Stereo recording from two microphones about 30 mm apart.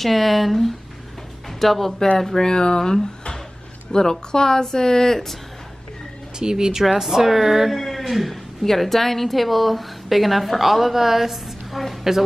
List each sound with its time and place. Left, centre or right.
0.0 s a woman's voice: centre
2.1 s speech: centre
3.9 s speech: left
6.4 s speech: centre
7.7 s a sound: centre
8.6 s a woman's voice: centre